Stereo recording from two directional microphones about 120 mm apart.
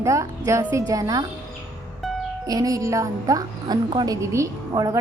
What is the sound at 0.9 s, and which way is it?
Speech, 30° right (ahead or behind).